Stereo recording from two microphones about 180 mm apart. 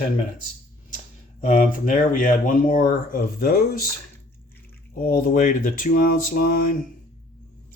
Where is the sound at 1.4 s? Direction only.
45° left (ahead or behind).